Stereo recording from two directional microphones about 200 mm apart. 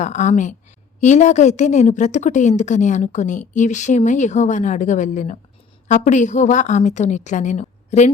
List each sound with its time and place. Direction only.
0.0 s a woman's voice: 35° left (ahead or behind)